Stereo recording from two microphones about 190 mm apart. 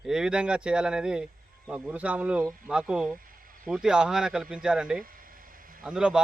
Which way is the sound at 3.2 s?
45° right (ahead or behind).